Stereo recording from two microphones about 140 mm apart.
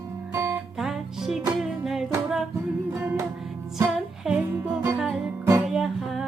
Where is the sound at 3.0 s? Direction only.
20° right (ahead or behind).